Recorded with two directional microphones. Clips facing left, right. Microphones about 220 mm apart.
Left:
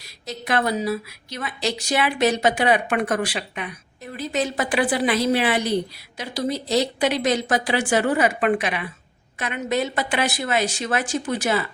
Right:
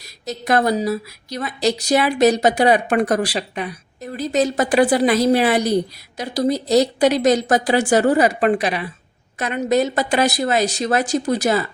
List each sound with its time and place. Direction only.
0.0 s a woman's voice: 40° right (ahead or behind)